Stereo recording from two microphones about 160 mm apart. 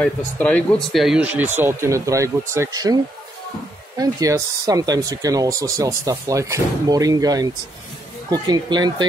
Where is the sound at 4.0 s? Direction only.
20° right (ahead or behind).